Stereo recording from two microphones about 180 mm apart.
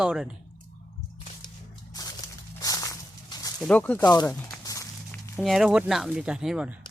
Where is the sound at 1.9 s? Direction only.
20° left (ahead or behind).